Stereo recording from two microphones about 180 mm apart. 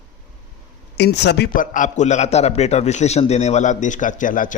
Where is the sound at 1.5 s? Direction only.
50° left (ahead or behind).